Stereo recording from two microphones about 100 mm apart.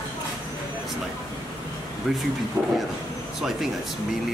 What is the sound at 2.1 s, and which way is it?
Speech, 5° right (ahead or behind).